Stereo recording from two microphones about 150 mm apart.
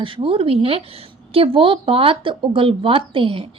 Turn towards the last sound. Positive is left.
turn(degrees=-35)  # may be behind; listen again after turning